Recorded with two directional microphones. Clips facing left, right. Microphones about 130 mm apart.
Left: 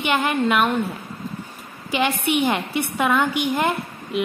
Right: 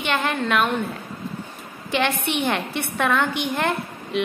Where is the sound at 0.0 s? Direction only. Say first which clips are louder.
Left 3 dB; 10° left (ahead or behind).